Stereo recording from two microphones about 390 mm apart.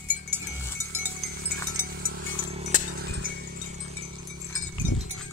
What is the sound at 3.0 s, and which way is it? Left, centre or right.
Wind chime, right.